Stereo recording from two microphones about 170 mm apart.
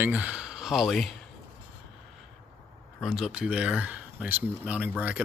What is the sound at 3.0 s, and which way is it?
Speech, 5° right (ahead or behind).